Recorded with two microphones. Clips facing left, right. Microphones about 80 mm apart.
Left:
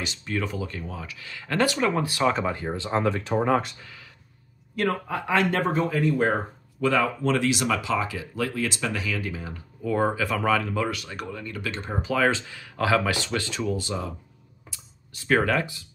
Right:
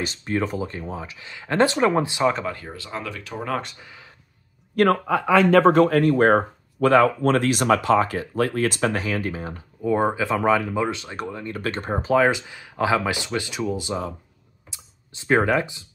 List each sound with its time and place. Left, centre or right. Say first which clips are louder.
0.0 s speech: right 5 dB; right
2.4 s speech: left 3 dB; left
3.8 s a sound: right 1 dB; right
4.8 s a man's voice: right 8 dB; right
5.7 s speech: right 8 dB; right
9.8 s speech: right 3 dB; right
11.5 s speech: right 6 dB; right
12.2 s speech: even; centre
14.7 s typing: right 2 dB; right